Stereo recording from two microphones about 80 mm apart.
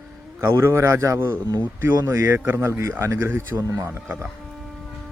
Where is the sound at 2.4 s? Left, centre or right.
Right.